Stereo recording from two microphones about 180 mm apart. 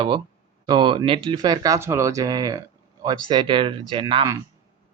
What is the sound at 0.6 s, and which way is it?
Speech, 25° right (ahead or behind).